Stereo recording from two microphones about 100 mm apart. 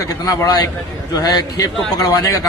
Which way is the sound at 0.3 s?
40° left (ahead or behind).